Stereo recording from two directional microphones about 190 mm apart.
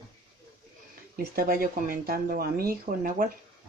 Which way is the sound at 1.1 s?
50° right (ahead or behind).